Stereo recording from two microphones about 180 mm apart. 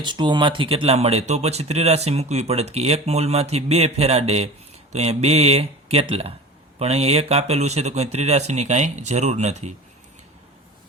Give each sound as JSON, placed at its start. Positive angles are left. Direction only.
{"t": 0.0, "sound": "speech", "side_deg": -25}